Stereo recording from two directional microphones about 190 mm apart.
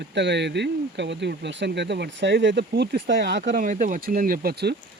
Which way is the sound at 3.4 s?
40° right (ahead or behind).